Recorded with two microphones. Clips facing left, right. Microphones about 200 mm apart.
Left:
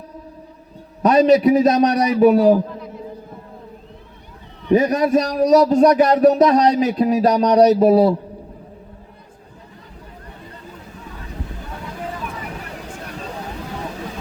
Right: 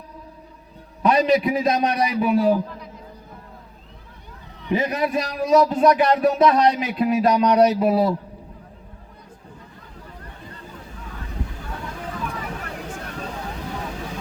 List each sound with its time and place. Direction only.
1.0 s a man's voice: 35° left (ahead or behind)
4.7 s a man's voice: 40° left (ahead or behind)